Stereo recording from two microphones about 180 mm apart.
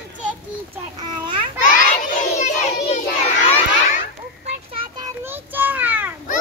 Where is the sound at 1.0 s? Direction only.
25° right (ahead or behind).